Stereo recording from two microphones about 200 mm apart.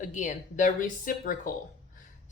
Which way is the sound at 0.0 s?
40° left (ahead or behind).